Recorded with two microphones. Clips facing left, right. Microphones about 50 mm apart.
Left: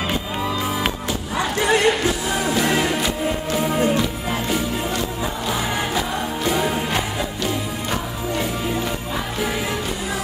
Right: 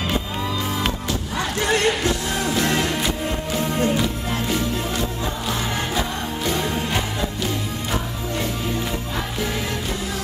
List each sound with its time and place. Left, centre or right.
0.8 s music: centre